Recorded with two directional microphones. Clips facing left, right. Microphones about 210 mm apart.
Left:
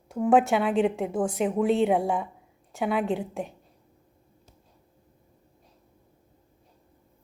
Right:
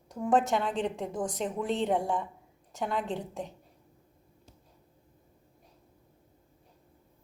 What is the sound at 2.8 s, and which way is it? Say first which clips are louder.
Speech: left 6 dB; 70° left (ahead or behind).